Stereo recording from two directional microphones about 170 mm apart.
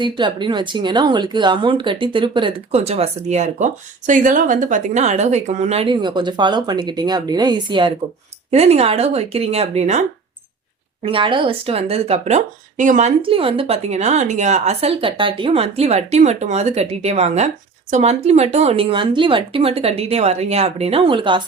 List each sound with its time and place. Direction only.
0.0 s speech: 25° right (ahead or behind)
8.4 s speech: 35° right (ahead or behind)
11.0 s speech: 30° right (ahead or behind)